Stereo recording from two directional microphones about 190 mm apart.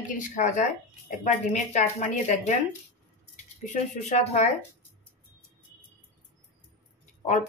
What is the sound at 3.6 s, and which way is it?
Speech, 35° left (ahead or behind).